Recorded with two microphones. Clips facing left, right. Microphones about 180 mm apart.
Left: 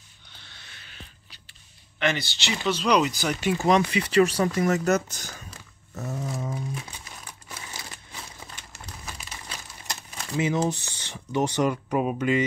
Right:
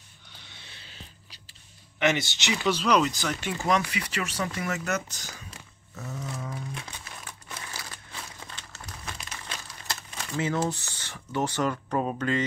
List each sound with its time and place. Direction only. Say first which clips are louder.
2.0 s speech: right 1 dB; 20° right (ahead or behind)
2.6 s speech: left 1 dB; 5° right (ahead or behind)
3.2 s speech: left 5 dB; 10° left (ahead or behind)
3.6 s speech: left 4 dB; 25° left (ahead or behind)
5.9 s a sound: left 5 dB; 40° left (ahead or behind)
6.7 s crumpling: left 3 dB; 10° left (ahead or behind)
10.3 s speech: left 3 dB; 15° left (ahead or behind)